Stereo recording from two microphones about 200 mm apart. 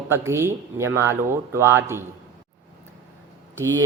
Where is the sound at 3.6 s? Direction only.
15° right (ahead or behind).